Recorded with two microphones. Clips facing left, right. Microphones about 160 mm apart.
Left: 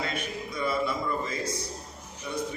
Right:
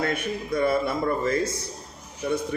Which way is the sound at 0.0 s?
55° right (ahead or behind).